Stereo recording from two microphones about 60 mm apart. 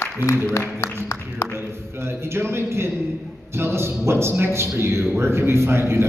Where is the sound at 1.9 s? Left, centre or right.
Right.